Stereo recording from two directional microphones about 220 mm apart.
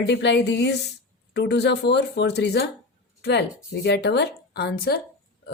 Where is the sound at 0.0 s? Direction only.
50° left (ahead or behind).